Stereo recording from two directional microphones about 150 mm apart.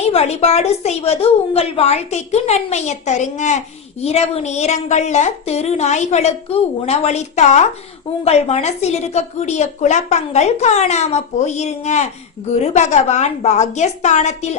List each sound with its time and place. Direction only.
0.0 s a woman's voice: 45° left (ahead or behind)